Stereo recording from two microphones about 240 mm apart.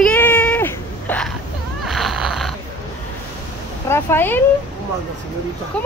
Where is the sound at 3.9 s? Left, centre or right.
Centre.